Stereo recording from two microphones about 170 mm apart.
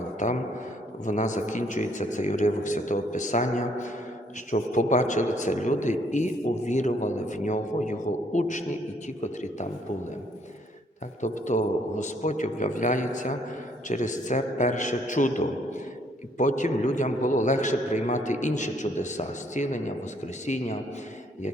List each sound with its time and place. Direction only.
0.2 s a man's voice: 45° left (ahead or behind)
11.2 s a man's voice: 45° left (ahead or behind)
16.4 s a man's voice: 45° left (ahead or behind)